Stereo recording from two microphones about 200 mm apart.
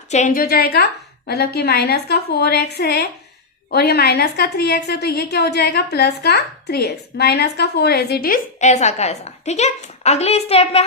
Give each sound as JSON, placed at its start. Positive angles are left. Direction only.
{"t": 0.1, "sound": "a woman's voice", "side_deg": 35}